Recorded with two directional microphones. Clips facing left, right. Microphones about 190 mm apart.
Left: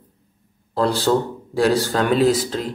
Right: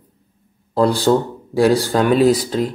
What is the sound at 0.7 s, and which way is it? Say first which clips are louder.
Speech: right 4 dB; 10° right (ahead or behind).